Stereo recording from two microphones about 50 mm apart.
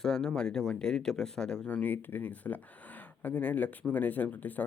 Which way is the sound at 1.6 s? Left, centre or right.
Left.